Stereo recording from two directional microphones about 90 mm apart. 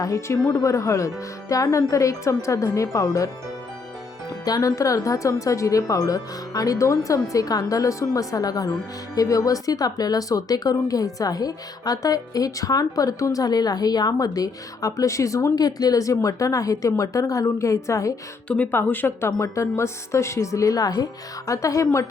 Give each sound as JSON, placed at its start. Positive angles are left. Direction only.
{"t": 0.0, "sound": "speech", "side_deg": 35}
{"t": 4.4, "sound": "speech", "side_deg": 45}
{"t": 15.5, "sound": "speech", "side_deg": 45}
{"t": 18.4, "sound": "speech", "side_deg": 15}